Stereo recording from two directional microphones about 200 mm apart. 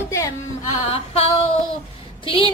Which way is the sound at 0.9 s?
30° left (ahead or behind).